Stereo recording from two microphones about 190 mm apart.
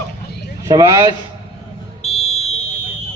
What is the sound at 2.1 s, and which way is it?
Fire alarm, 35° left (ahead or behind).